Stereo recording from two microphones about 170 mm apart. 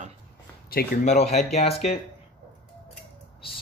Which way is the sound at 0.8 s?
65° left (ahead or behind).